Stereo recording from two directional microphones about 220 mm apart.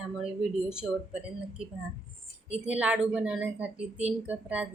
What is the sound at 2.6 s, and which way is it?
Speech, 5° right (ahead or behind).